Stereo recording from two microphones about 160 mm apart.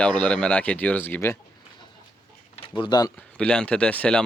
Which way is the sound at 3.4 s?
5° left (ahead or behind).